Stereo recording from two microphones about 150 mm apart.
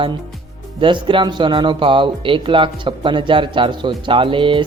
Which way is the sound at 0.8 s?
35° right (ahead or behind).